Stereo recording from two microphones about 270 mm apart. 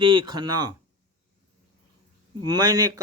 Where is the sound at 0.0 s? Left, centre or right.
Centre.